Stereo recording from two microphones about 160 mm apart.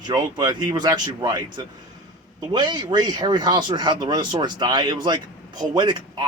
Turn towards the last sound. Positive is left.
turn(degrees=-25)  # may be behind; listen again after turning